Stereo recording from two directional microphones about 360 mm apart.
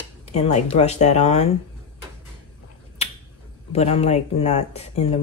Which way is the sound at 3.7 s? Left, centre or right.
Centre.